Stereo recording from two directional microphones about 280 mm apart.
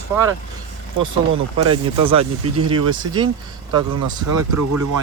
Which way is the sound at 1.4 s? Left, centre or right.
Right.